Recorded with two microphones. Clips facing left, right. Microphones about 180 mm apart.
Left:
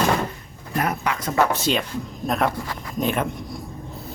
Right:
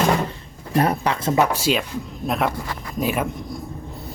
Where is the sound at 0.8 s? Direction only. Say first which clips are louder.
Right 4 dB; 30° right (ahead or behind).